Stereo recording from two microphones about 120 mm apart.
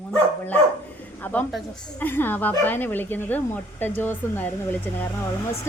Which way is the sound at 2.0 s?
15° left (ahead or behind).